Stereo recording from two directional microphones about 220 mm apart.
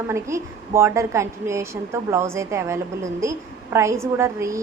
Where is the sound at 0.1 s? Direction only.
10° right (ahead or behind).